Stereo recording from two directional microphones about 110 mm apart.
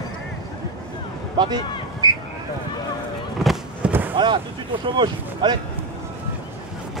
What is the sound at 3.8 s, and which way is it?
Fireworks, 10° right (ahead or behind).